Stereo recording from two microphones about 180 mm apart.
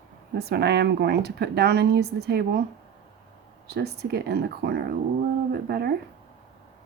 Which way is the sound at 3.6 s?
65° right (ahead or behind).